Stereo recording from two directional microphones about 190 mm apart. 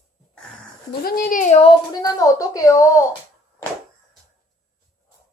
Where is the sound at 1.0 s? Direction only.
50° left (ahead or behind); by 1.8 s 35° left (ahead or behind).